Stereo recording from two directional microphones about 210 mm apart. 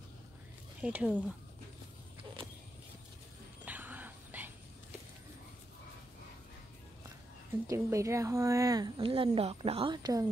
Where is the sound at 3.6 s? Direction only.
10° right (ahead or behind).